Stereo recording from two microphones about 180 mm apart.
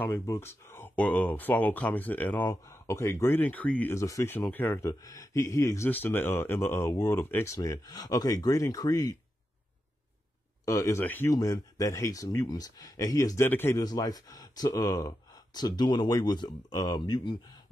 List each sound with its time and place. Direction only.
0.0 s speech: 15° left (ahead or behind)
10.6 s speech: 15° left (ahead or behind)